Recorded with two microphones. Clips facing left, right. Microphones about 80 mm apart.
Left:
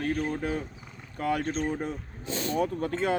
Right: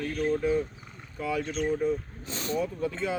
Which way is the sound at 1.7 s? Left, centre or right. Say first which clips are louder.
Right 5 dB; left.